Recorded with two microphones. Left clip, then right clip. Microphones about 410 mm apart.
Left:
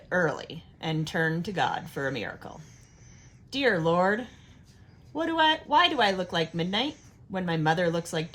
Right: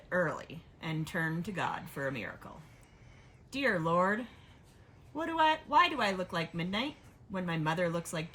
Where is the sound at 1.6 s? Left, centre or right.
Centre.